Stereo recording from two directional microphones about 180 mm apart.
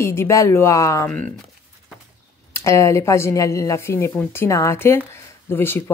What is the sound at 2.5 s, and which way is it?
Speech, 15° left (ahead or behind).